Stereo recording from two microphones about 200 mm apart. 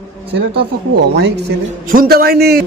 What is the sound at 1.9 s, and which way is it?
Speech, 45° right (ahead or behind).